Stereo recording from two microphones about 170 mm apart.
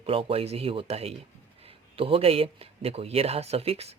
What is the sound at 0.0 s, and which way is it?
Speech, 35° right (ahead or behind).